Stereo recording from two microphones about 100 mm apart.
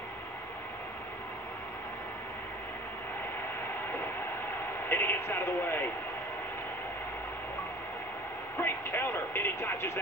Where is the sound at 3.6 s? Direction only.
20° left (ahead or behind).